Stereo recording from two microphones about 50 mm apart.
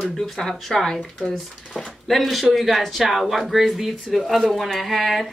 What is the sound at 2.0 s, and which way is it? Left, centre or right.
Speech, centre.